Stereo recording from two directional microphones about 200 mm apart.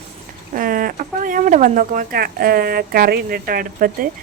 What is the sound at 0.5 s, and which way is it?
A woman's voice, 45° right (ahead or behind).